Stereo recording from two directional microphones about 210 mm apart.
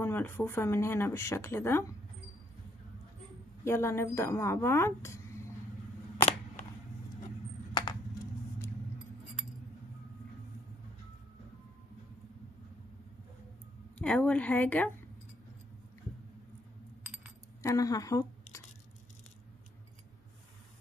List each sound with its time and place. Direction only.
0.0 s speech: 10° left (ahead or behind)
3.6 s speech: 10° left (ahead or behind)
14.0 s speech: 5° left (ahead or behind)
17.6 s speech: 15° left (ahead or behind)